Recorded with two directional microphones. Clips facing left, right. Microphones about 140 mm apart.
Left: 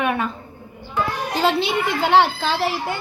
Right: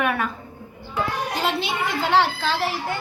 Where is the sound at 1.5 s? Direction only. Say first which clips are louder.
Left 4 dB; 65° left (ahead or behind).